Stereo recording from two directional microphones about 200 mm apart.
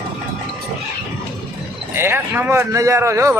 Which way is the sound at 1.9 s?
10° right (ahead or behind).